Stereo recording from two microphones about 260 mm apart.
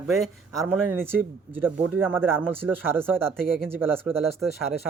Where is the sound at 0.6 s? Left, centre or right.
Centre.